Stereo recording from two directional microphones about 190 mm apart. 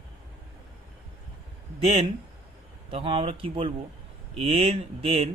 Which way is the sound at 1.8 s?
30° right (ahead or behind).